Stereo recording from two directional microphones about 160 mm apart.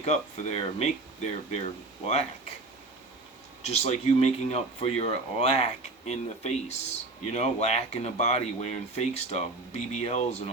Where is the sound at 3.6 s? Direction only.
40° left (ahead or behind).